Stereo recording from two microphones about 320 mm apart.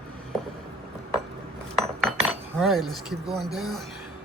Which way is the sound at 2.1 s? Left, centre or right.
Centre.